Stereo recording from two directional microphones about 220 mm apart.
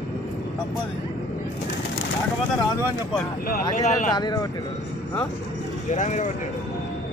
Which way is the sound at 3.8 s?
35° left (ahead or behind).